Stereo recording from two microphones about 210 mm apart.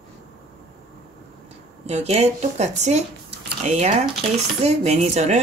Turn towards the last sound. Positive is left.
turn(degrees=-30)  # may be behind; listen again after turning